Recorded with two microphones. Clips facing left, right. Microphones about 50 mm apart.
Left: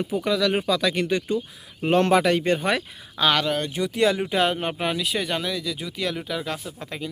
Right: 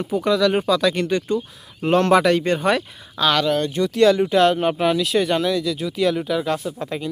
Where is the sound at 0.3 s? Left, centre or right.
Centre.